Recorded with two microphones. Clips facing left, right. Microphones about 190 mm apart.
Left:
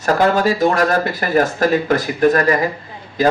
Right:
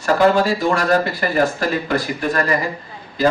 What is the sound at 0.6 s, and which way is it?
Speech, 45° left (ahead or behind).